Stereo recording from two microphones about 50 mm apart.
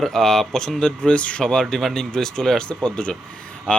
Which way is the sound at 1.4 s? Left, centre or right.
Centre.